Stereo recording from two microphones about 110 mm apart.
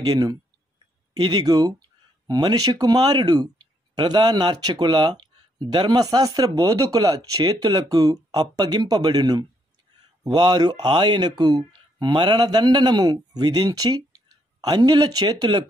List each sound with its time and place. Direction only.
0.0 s speech: 35° right (ahead or behind)